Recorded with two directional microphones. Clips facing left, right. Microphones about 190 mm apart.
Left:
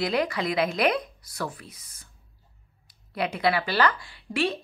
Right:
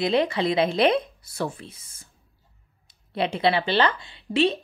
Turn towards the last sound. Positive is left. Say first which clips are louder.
# right 5 dB
turn(degrees=-25)  # may be behind; listen again after turning